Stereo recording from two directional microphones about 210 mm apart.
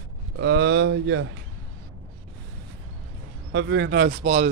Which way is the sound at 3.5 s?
60° right (ahead or behind).